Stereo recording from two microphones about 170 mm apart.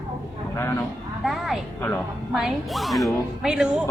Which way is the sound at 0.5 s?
15° left (ahead or behind).